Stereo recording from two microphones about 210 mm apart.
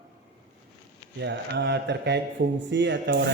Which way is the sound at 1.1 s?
55° right (ahead or behind).